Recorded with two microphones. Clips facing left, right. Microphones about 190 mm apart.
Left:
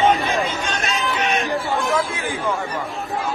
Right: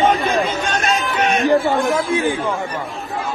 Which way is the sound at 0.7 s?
50° right (ahead or behind).